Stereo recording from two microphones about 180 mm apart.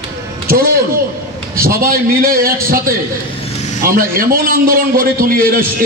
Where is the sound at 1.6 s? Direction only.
55° right (ahead or behind).